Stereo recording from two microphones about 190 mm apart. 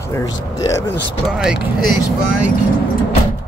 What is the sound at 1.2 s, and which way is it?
Speech, 5° right (ahead or behind).